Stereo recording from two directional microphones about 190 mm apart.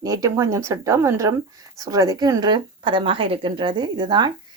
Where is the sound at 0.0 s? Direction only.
20° right (ahead or behind).